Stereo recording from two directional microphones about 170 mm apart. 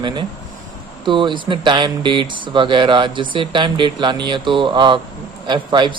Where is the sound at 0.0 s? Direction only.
25° right (ahead or behind).